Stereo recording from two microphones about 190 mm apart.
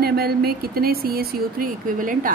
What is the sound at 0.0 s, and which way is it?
A woman's voice, 55° right (ahead or behind).